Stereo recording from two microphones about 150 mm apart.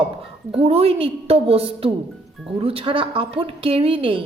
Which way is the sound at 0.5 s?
40° right (ahead or behind).